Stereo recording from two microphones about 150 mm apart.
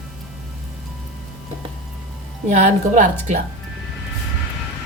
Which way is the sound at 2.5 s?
55° right (ahead or behind).